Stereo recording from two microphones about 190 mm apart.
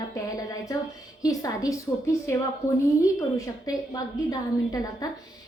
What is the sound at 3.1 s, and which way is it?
A woman's voice, 20° left (ahead or behind).